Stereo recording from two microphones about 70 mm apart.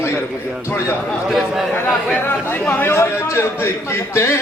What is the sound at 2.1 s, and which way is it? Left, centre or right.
Chatter, left.